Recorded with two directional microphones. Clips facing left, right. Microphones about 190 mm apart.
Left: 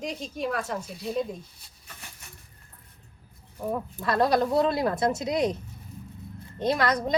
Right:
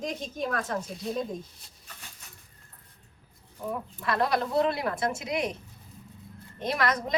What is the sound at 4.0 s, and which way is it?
Speech, 35° left (ahead or behind).